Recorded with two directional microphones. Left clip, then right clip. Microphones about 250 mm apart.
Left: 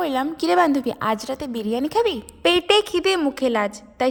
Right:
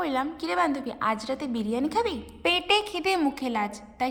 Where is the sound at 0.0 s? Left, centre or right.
Left.